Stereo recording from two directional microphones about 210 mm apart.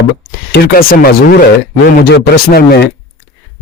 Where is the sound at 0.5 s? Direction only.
45° left (ahead or behind).